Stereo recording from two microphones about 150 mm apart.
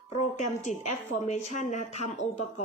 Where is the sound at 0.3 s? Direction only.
55° left (ahead or behind).